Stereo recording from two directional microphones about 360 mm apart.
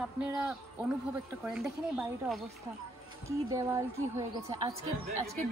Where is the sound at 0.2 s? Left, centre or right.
Centre.